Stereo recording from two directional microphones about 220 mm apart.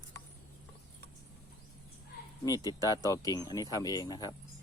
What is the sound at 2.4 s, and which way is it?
Speech, 15° left (ahead or behind).